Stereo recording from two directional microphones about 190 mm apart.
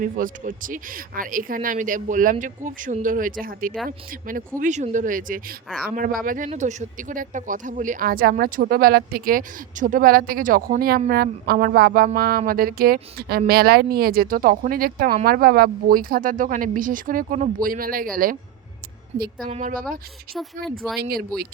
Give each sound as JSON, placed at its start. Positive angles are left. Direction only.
{"t": 0.0, "sound": "speech", "side_deg": -45}
{"t": 19.1, "sound": "speech", "side_deg": -35}
{"t": 20.3, "sound": "speech", "side_deg": 0}
{"t": 21.0, "sound": "speech", "side_deg": -55}